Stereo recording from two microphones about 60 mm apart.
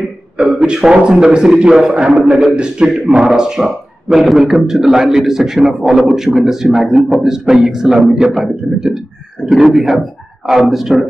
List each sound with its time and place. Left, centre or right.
0.4 s a man's voice: centre